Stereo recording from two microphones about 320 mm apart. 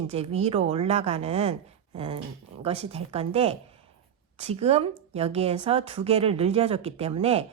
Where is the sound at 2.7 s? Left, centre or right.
Centre.